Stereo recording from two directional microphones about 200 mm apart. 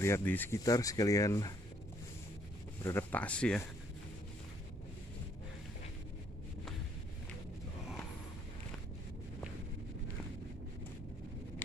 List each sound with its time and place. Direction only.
0.0 s speech: 10° left (ahead or behind)
2.8 s speech: 10° left (ahead or behind)